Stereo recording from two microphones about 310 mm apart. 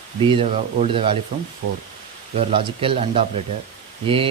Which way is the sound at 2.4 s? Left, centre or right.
Centre.